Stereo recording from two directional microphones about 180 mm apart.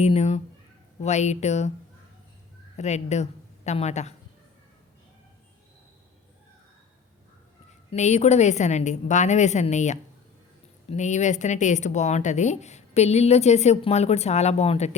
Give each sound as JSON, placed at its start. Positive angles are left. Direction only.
{"t": 0.0, "sound": "speech", "side_deg": 40}
{"t": 2.7, "sound": "a woman's voice", "side_deg": 40}
{"t": 7.9, "sound": "speech", "side_deg": 40}